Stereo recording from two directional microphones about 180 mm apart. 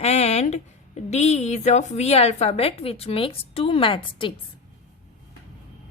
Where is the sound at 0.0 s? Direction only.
35° left (ahead or behind).